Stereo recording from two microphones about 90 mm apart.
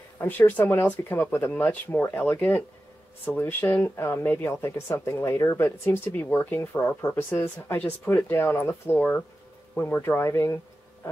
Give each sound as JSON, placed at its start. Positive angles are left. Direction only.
{"t": 0.2, "sound": "speech", "side_deg": 20}